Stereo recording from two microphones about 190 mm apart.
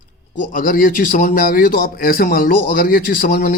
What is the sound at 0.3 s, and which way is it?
A man's voice, 45° left (ahead or behind).